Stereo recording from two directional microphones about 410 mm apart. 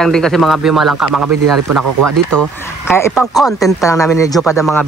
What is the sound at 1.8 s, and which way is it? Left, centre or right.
Speech, right.